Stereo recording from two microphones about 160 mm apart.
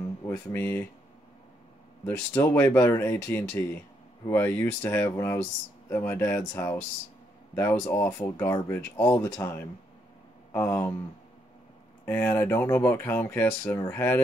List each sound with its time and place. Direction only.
0.3 s speech: 10° left (ahead or behind)
2.0 s speech: 15° left (ahead or behind)
12.0 s speech: 10° left (ahead or behind)